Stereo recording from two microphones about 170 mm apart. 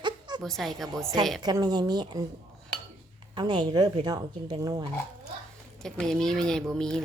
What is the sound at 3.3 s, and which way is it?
Speech, 25° right (ahead or behind).